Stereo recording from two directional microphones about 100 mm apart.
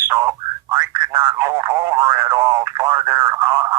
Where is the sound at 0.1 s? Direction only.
35° right (ahead or behind).